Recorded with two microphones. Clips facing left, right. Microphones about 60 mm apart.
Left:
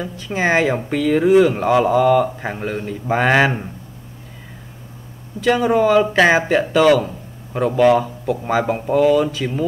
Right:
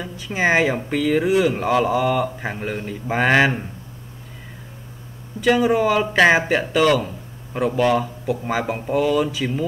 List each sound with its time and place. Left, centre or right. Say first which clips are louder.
0.0 s speech: left 1 dB; centre
5.4 s speech: left 2 dB; centre